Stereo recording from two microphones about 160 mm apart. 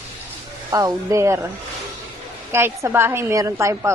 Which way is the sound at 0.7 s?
20° right (ahead or behind).